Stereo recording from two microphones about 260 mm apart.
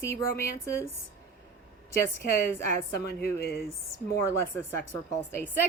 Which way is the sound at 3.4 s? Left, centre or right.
Left.